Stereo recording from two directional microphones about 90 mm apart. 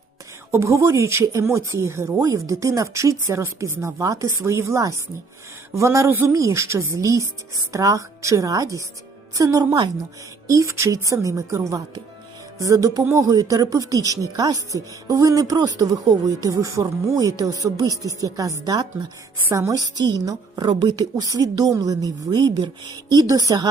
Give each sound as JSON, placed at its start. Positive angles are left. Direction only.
{"t": 0.5, "sound": "a woman's voice", "side_deg": -35}